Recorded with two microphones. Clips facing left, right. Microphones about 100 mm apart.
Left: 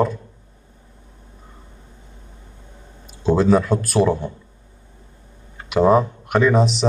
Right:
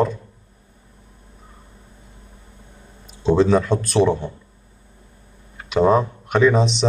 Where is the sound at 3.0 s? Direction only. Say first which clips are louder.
Even; 5° left (ahead or behind).